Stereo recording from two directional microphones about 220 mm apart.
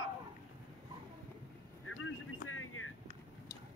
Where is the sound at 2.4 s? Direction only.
70° left (ahead or behind).